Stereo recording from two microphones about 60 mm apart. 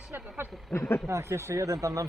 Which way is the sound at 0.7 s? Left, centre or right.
Left.